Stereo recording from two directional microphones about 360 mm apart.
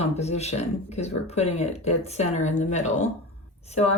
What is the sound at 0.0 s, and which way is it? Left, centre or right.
Speech, centre.